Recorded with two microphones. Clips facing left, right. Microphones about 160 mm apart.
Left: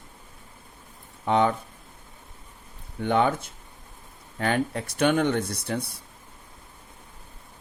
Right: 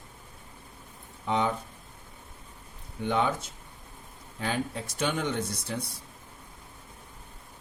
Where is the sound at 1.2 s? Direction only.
60° left (ahead or behind).